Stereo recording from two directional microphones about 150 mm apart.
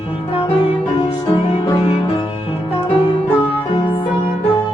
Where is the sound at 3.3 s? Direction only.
15° left (ahead or behind).